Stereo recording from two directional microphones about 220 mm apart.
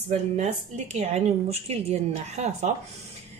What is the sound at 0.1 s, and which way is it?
Speech, 30° right (ahead or behind).